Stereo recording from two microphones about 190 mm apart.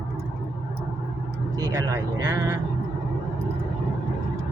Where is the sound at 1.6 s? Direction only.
20° right (ahead or behind).